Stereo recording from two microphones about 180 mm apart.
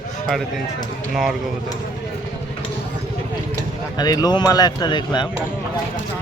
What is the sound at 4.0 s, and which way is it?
Speech, 20° left (ahead or behind).